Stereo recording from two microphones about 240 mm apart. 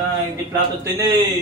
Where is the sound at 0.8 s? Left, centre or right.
Centre.